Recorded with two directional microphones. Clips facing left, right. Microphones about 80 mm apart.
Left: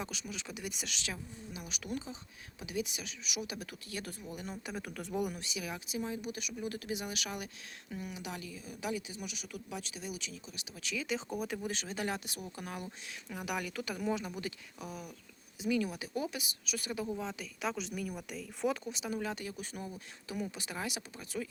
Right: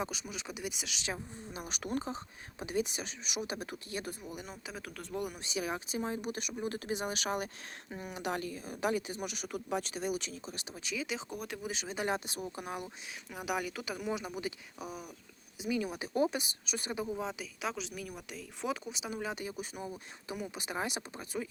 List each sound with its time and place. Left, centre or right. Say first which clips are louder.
0.0 s a woman's voice: right 3 dB; right
1.5 s speech: right 4 dB; right; by 4.4 s centre
4.4 s speech: left 3 dB; centre
5.4 s speech: right 5 dB; right
10.8 s a woman's voice: left 1 dB; centre
16.1 s a woman's voice: right 9 dB; right